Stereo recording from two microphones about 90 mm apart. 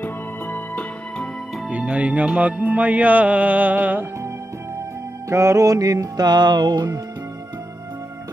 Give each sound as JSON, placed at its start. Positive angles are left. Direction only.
{"t": 0.0, "sound": "music", "side_deg": 20}
{"t": 1.7, "sound": "music", "side_deg": -15}
{"t": 5.3, "sound": "music", "side_deg": -35}